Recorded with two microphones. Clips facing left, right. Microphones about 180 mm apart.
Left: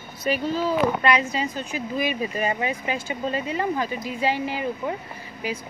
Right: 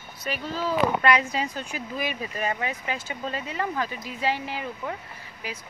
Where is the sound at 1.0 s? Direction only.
10° right (ahead or behind).